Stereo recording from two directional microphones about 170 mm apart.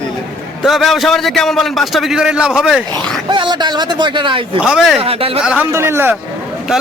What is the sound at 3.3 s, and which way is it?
Speech, 25° right (ahead or behind).